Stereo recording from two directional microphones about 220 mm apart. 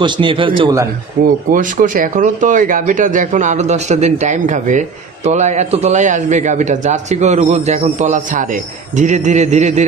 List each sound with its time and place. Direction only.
0.0 s a man's voice: 25° right (ahead or behind)
1.2 s speech: 35° right (ahead or behind)